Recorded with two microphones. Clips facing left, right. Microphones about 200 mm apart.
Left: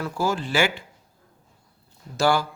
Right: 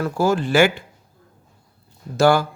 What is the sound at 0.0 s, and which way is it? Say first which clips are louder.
Speech: right 6 dB; 50° right (ahead or behind).